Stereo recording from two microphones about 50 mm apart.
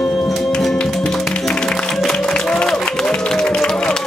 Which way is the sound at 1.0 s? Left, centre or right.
Centre.